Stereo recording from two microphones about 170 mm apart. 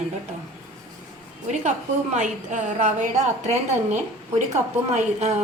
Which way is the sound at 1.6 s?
45° right (ahead or behind).